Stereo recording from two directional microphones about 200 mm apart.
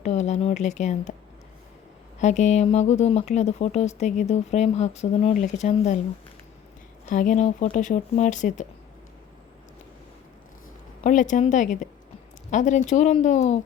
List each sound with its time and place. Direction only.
0.0 s a sound: 35° left (ahead or behind)
2.2 s speech: 35° left (ahead or behind)
7.1 s speech: 40° left (ahead or behind)
11.0 s speech: 40° left (ahead or behind)